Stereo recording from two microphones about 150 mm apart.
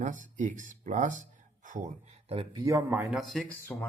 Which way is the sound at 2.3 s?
25° right (ahead or behind).